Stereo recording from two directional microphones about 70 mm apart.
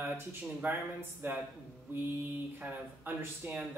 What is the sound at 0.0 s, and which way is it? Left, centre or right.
Speech, right.